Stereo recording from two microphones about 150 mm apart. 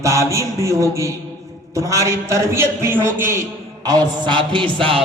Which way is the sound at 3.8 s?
25° right (ahead or behind).